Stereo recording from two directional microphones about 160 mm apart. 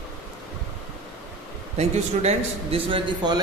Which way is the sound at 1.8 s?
40° right (ahead or behind).